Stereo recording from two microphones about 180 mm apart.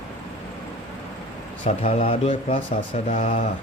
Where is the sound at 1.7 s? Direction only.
35° left (ahead or behind).